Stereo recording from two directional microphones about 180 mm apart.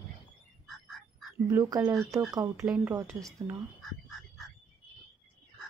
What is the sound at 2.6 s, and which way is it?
Speech, 5° right (ahead or behind).